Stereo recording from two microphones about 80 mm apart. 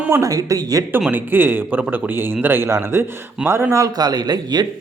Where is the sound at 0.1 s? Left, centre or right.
Right.